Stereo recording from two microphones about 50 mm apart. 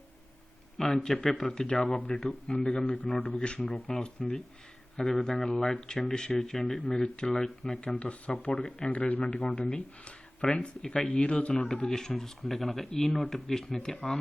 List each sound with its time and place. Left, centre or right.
0.8 s speech: centre
7.8 s speech: left
11.7 s speech: centre